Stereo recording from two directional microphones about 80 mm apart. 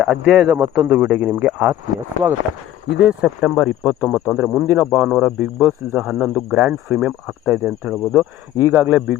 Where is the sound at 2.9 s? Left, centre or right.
Centre.